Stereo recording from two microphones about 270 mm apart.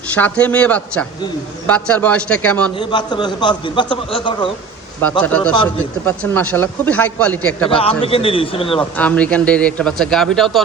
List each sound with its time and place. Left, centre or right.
0.1 s speech: centre
2.7 s a man's voice: centre
5.2 s speech: centre
7.7 s a man's voice: left
8.8 s speech: centre